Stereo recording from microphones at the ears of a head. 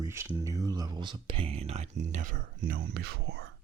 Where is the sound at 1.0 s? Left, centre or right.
Right.